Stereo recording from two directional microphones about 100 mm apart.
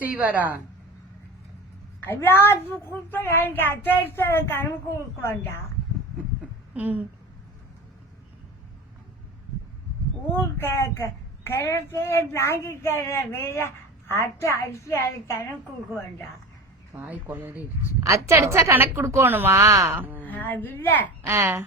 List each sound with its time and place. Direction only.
0.0 s a woman's voice: 15° right (ahead or behind)
2.0 s speech: 20° left (ahead or behind)
6.7 s a woman's voice: 15° right (ahead or behind)
10.3 s speech: 25° left (ahead or behind)
17.1 s a woman's voice: 20° right (ahead or behind)
20.0 s a woman's voice: 20° right (ahead or behind)
20.2 s speech: 15° left (ahead or behind)
21.2 s a woman's voice: 25° right (ahead or behind)